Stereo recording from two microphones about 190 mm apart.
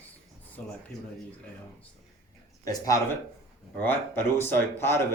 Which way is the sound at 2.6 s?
15° left (ahead or behind).